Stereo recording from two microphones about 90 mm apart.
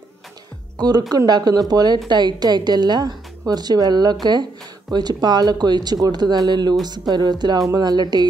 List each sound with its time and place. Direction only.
0.7 s speech: 45° right (ahead or behind)